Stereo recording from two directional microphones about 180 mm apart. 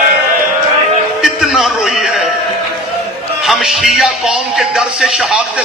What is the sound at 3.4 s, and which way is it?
A man's voice, centre (ahead or behind).